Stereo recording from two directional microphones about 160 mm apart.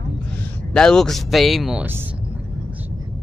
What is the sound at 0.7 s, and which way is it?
Speech, 5° left (ahead or behind).